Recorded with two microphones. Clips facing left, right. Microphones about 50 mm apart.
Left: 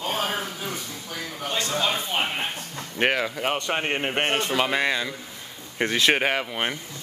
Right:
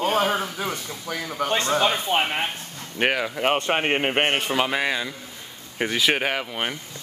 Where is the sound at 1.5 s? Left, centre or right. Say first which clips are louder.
Right 4 dB; right.